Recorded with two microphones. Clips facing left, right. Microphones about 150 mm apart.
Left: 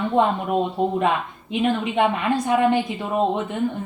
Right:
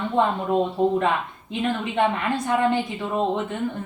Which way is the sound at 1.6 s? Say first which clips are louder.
Left 2 dB; 20° left (ahead or behind).